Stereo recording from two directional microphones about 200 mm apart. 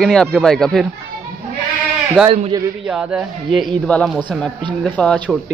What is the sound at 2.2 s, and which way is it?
Speech, 30° right (ahead or behind).